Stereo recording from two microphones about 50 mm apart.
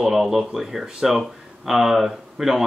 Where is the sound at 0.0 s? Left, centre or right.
Centre.